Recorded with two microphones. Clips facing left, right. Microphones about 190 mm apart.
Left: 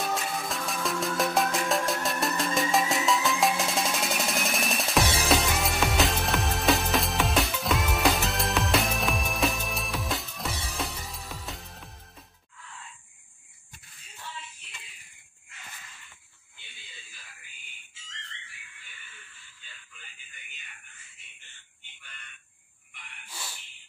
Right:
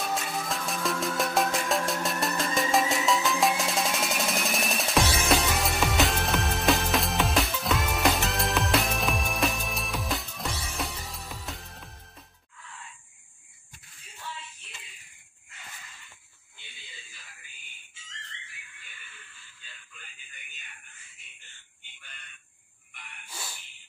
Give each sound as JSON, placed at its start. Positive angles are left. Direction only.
{"t": 0.0, "sound": "music", "side_deg": 0}